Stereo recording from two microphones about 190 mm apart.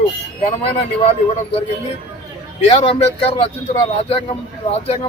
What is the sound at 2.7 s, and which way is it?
A man's voice, 30° left (ahead or behind).